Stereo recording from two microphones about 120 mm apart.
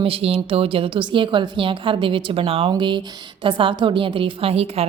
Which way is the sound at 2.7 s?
40° right (ahead or behind).